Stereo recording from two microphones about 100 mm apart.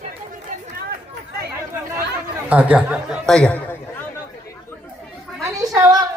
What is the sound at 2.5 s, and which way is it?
Speech, 15° right (ahead or behind).